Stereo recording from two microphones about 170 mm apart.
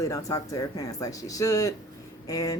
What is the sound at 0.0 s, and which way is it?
A woman's voice, 20° left (ahead or behind).